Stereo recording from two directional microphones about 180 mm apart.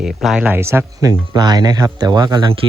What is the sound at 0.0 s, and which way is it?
Speech, centre (ahead or behind).